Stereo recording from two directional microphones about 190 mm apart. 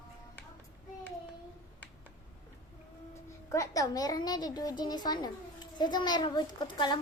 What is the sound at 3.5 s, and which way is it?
A woman's voice, 15° left (ahead or behind).